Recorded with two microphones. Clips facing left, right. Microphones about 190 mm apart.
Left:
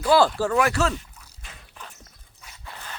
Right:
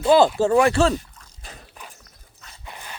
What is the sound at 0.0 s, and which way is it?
Speech, 20° right (ahead or behind).